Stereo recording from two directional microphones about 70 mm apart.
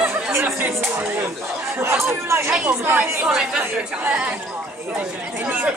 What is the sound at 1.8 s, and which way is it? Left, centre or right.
Speech, right.